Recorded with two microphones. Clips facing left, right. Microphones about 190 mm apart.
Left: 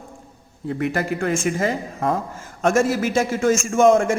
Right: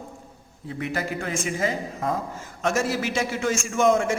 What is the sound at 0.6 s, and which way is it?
A man's voice, 55° left (ahead or behind).